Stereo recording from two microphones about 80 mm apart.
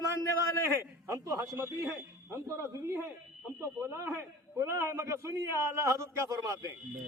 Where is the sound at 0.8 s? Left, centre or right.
Right.